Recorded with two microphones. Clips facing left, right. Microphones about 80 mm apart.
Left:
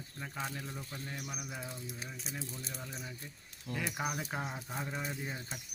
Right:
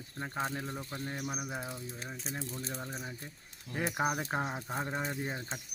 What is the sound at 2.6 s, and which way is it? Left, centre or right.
Speech, right.